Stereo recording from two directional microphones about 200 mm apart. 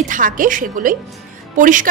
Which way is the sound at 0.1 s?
40° right (ahead or behind).